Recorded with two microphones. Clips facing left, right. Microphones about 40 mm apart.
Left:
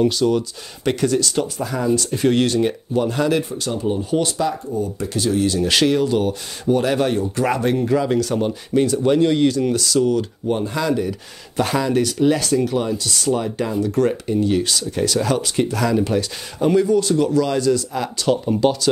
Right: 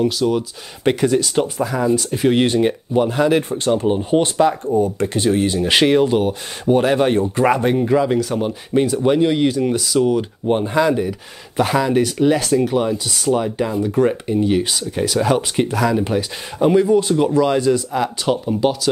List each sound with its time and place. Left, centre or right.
0.0 s speech: centre
0.8 s speech: centre
1.6 s speech: centre
2.4 s speech: right
3.4 s speech: right
4.6 s speech: right
7.4 s speech: centre